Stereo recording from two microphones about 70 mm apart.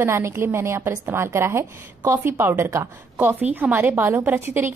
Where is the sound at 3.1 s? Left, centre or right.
Right.